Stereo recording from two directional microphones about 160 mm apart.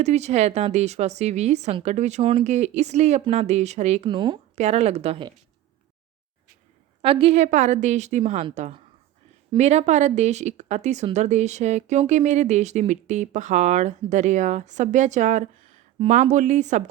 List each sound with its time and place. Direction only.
0.0 s speech: 45° right (ahead or behind)
4.1 s speech: 30° right (ahead or behind)
4.5 s speech: 40° right (ahead or behind)
7.0 s speech: 35° right (ahead or behind)